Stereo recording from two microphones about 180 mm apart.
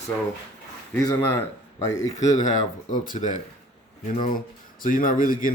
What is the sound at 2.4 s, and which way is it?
Speech, 45° left (ahead or behind).